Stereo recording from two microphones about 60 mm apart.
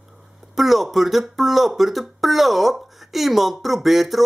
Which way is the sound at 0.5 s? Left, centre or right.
Centre.